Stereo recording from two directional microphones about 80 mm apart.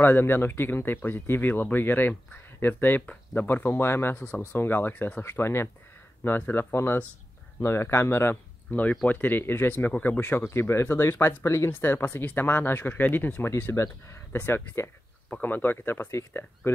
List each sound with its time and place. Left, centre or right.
0.0 s speech: left
4.2 s speech: left